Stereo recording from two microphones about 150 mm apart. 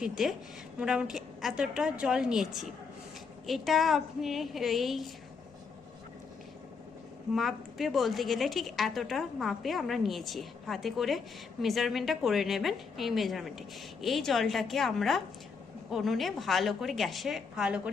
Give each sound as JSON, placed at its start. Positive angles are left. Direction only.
{"t": 0.0, "sound": "a woman's voice", "side_deg": -5}
{"t": 7.3, "sound": "a woman's voice", "side_deg": 0}